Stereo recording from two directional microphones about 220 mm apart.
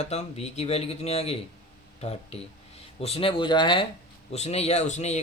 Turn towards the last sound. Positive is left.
turn(degrees=30)  # may be behind; listen again after turning